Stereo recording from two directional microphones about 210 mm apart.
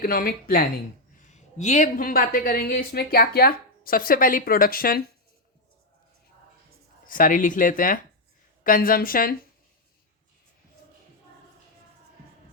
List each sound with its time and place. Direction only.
0.0 s a woman's voice: 45° left (ahead or behind)
7.1 s a woman's voice: 40° left (ahead or behind)